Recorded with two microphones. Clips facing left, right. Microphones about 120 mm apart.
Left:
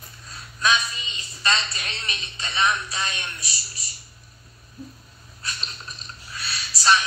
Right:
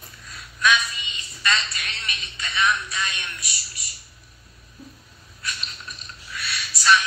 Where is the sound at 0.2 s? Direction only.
30° left (ahead or behind).